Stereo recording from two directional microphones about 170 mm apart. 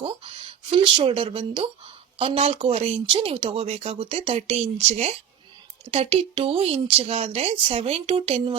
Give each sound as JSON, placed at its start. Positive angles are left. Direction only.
{"t": 0.7, "sound": "speech", "side_deg": -30}